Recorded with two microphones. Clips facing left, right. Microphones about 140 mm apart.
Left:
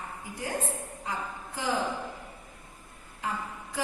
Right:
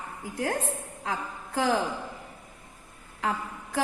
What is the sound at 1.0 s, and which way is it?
Mantra, 90° right.